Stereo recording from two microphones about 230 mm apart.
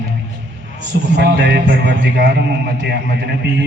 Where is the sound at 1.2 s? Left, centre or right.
Right.